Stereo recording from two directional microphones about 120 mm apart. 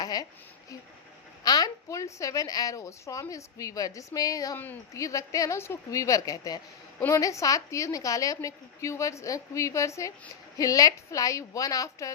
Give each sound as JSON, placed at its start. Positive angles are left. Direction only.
{"t": 0.0, "sound": "speech", "side_deg": 30}
{"t": 1.5, "sound": "a woman's voice", "side_deg": 35}
{"t": 4.5, "sound": "a woman's voice", "side_deg": 15}
{"t": 4.9, "sound": "a woman's voice", "side_deg": 25}